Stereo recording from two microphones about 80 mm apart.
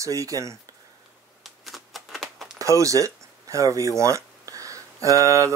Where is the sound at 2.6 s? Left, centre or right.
Right.